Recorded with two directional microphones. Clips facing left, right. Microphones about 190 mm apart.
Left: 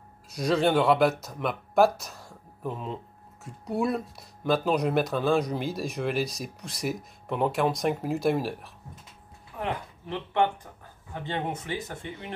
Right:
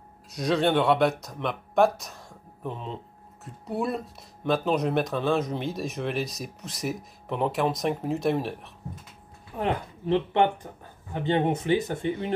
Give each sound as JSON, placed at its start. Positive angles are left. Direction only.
{"t": 0.3, "sound": "speech", "side_deg": 0}
{"t": 9.6, "sound": "speech", "side_deg": -30}